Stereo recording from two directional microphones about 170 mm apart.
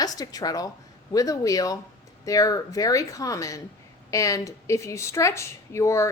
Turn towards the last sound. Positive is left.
turn(degrees=15)  # may be behind; listen again after turning